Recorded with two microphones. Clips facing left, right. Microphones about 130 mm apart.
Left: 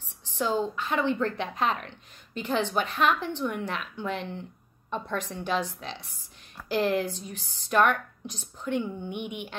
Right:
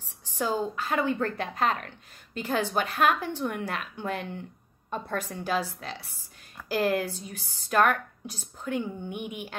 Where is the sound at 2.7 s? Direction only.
45° right (ahead or behind).